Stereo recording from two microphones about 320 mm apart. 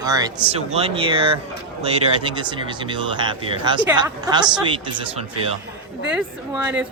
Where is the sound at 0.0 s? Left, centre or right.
Centre.